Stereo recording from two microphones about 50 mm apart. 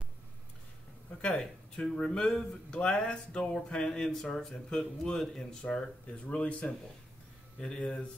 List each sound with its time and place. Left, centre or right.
1.2 s speech: left
5.6 s speech: centre
7.6 s speech: centre